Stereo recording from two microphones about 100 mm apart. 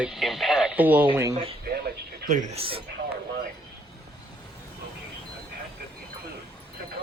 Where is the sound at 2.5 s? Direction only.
70° right (ahead or behind).